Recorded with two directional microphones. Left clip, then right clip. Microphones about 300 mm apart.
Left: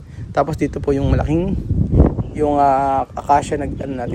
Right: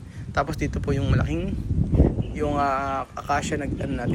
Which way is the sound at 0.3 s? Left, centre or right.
Left.